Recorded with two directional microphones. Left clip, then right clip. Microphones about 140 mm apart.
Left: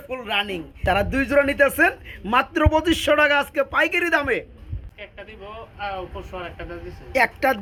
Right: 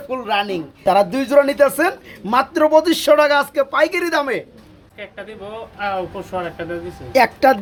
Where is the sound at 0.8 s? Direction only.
15° left (ahead or behind).